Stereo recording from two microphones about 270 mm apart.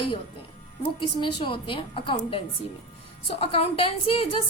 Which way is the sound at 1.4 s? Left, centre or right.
Centre.